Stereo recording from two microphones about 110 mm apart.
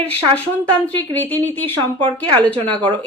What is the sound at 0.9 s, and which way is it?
Speech, 15° left (ahead or behind).